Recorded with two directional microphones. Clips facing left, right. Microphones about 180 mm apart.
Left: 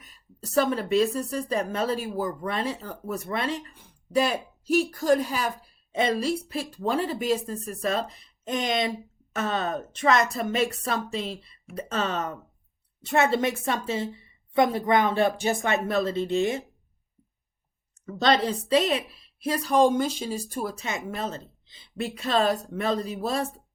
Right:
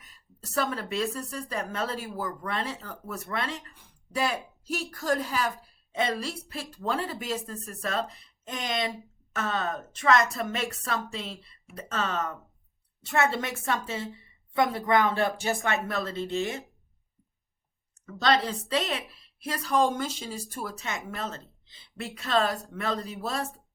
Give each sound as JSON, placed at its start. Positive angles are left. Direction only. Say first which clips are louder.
{"t": 0.3, "sound": "a woman's voice", "louder": "left 6 dB", "side_deg": 15}
{"t": 18.0, "sound": "a woman's voice", "louder": "left 3 dB", "side_deg": 25}